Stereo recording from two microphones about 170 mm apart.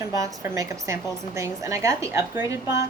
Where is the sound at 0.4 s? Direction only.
20° right (ahead or behind).